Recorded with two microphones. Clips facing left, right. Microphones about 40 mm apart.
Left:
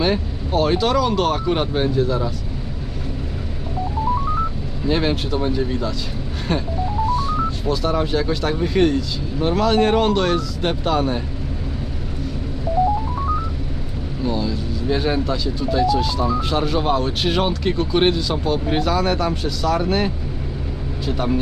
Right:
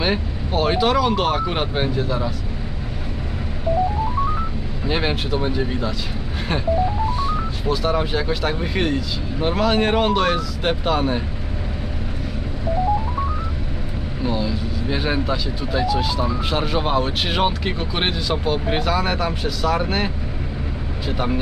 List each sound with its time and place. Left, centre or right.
0.0 s speech: centre
4.9 s speech: centre
7.1 s speech: centre
14.2 s speech: centre